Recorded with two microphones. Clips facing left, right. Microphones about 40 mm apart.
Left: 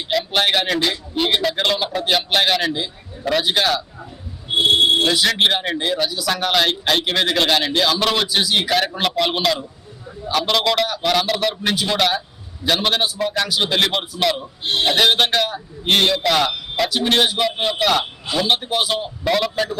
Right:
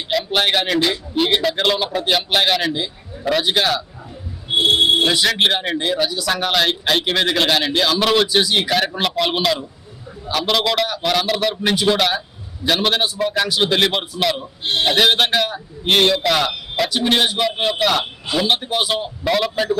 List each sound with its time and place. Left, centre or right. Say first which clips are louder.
0.1 s a man's voice: even; centre